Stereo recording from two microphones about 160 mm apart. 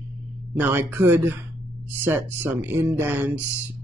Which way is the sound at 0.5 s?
15° right (ahead or behind).